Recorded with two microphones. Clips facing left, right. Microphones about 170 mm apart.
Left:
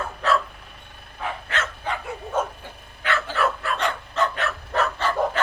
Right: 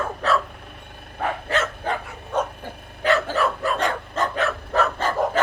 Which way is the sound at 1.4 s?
40° right (ahead or behind).